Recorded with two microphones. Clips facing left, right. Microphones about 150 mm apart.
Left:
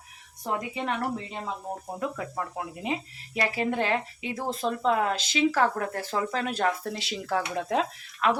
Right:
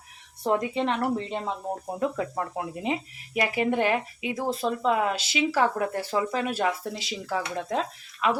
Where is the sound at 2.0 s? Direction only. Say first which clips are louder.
Right 5 dB; 20° right (ahead or behind).